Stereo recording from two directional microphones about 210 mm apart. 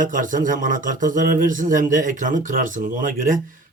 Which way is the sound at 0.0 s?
40° right (ahead or behind).